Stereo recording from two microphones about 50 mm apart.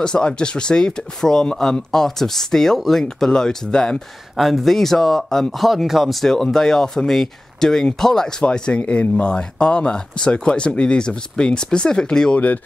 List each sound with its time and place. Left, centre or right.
0.0 s speech: centre
4.4 s speech: centre